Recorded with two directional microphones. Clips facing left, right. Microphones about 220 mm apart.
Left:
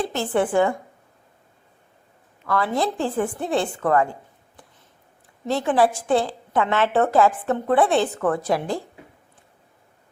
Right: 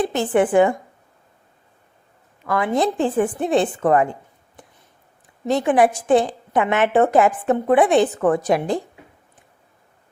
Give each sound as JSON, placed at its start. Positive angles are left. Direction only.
{"t": 0.0, "sound": "a woman's voice", "side_deg": -20}
{"t": 2.5, "sound": "a woman's voice", "side_deg": -20}